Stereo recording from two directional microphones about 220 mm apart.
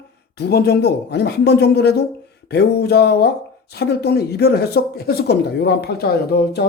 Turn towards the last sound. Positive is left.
turn(degrees=45)  # may be behind; listen again after turning